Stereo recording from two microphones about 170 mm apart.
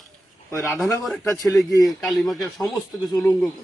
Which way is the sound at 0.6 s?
Centre (ahead or behind).